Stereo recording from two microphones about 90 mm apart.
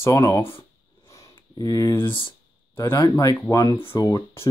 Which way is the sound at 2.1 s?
65° left (ahead or behind).